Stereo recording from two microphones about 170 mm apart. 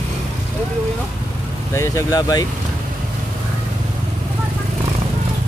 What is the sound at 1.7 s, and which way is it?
Speech, 15° left (ahead or behind).